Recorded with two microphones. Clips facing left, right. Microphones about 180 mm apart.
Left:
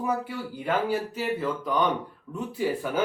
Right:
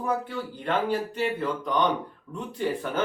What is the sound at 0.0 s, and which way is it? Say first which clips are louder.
A man's voice: even; 10° left (ahead or behind).